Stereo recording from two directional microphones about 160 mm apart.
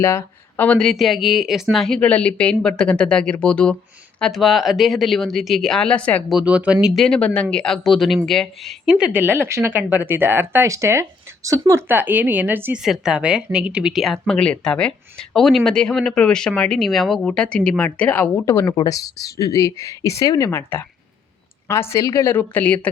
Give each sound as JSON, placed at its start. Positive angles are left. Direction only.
{"t": 0.0, "sound": "speech", "side_deg": 15}
{"t": 6.2, "sound": "speech", "side_deg": -5}